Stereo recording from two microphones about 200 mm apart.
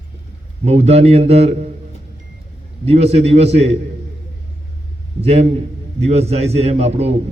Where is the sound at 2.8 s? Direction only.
30° right (ahead or behind).